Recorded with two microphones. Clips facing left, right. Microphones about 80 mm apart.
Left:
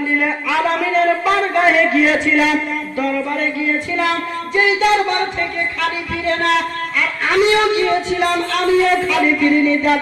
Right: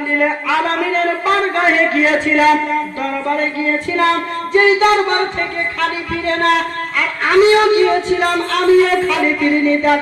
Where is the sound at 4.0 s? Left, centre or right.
Right.